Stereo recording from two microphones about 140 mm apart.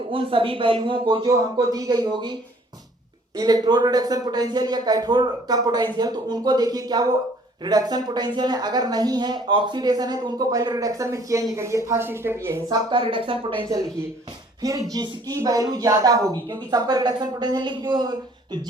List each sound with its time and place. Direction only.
0.1 s speech: 40° right (ahead or behind)
1.4 s speech: 25° right (ahead or behind)
13.7 s speech: 25° right (ahead or behind)